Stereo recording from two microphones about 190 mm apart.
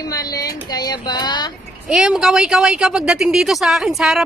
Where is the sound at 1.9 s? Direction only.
5° right (ahead or behind).